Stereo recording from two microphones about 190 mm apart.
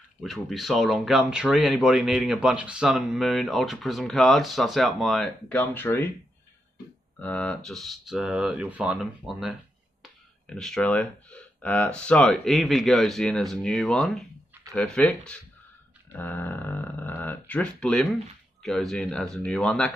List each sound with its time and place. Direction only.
0.2 s speech: centre (ahead or behind)
7.2 s speech: 5° left (ahead or behind)